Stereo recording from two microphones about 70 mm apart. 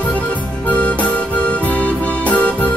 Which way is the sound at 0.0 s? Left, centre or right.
Centre.